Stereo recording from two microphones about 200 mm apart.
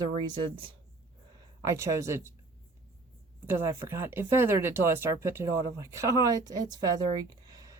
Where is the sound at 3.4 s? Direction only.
10° right (ahead or behind).